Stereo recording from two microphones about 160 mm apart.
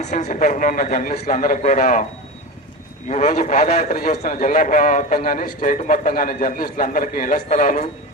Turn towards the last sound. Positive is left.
turn(degrees=55)  # may be behind; listen again after turning